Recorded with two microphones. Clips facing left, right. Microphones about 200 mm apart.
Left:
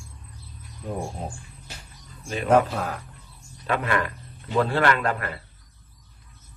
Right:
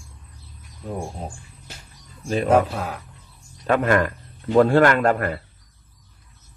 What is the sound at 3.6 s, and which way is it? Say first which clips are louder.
Speech: right 6 dB; 45° right (ahead or behind).